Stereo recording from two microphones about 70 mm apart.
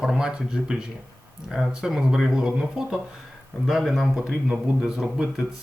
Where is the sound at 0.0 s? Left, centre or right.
Centre.